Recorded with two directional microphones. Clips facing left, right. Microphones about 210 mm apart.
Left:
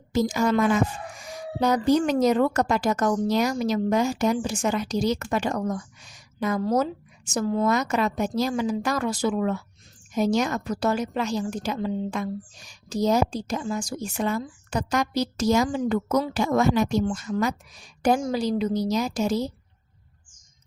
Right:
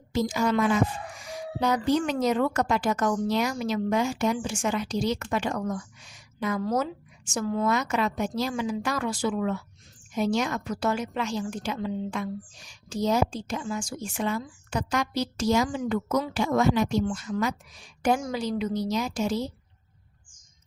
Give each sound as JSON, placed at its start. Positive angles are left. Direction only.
{"t": 0.1, "sound": "a woman's voice", "side_deg": 45}